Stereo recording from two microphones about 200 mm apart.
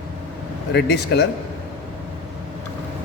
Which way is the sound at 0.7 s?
55° left (ahead or behind).